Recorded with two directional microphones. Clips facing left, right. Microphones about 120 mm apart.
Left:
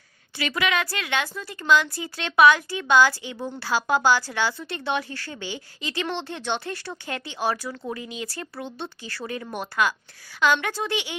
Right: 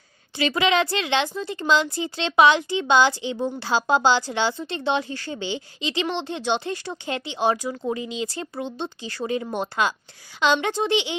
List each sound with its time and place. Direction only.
0.3 s a woman's voice: 25° right (ahead or behind)